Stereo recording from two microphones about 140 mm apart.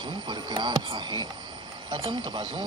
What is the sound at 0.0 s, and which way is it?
Speech, 35° right (ahead or behind).